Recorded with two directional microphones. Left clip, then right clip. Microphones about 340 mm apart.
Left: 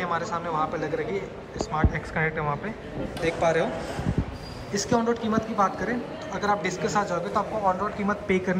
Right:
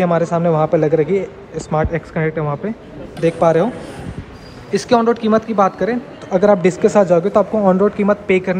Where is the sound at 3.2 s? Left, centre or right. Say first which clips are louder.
Right 10 dB; centre.